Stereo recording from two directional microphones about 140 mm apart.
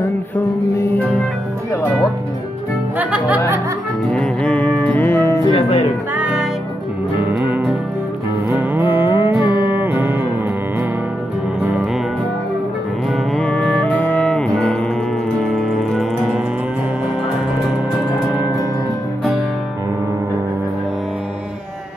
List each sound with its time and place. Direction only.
3.0 s music: 10° right (ahead or behind)
4.1 s music: 5° left (ahead or behind)
5.5 s music: 45° left (ahead or behind)
6.1 s music: 10° right (ahead or behind)
13.1 s music: 5° left (ahead or behind)